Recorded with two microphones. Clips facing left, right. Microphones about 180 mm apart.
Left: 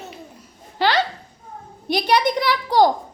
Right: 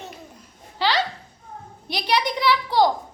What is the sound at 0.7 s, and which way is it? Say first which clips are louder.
Laughter: left 3 dB; 55° left (ahead or behind).